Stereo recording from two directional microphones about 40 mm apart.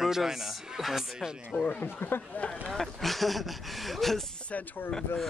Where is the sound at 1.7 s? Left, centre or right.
Left.